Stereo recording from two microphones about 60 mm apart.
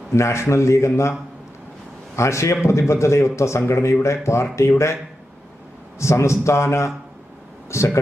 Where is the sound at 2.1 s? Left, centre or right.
Left.